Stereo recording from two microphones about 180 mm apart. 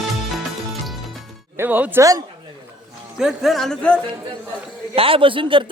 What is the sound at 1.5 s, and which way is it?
Speech, 10° right (ahead or behind).